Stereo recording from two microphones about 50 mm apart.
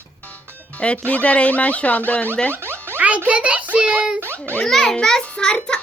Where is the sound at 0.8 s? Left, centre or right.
Left.